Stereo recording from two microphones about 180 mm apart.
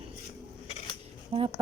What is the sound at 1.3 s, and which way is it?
Speech, 35° right (ahead or behind).